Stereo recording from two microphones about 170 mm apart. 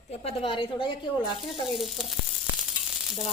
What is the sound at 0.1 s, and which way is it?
Speech, 35° left (ahead or behind).